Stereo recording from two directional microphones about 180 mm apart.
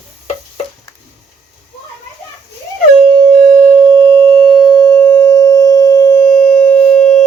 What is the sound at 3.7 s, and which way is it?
Sine wave, 15° right (ahead or behind).